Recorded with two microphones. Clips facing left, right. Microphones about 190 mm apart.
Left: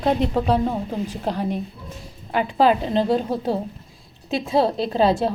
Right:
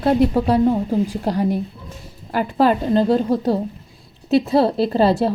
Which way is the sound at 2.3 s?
Centre (ahead or behind).